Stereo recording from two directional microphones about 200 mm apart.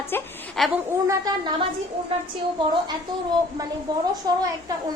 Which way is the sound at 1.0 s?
20° right (ahead or behind).